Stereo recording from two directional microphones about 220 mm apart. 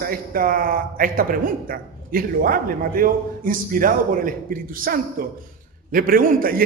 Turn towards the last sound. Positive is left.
turn(degrees=-40)  # may be behind; listen again after turning